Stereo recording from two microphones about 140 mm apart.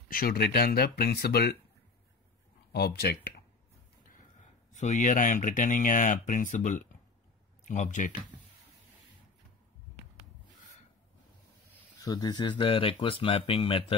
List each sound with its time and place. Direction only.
0.1 s speech: 90° left
4.7 s speech: 60° left (ahead or behind)
12.0 s speech: 25° left (ahead or behind)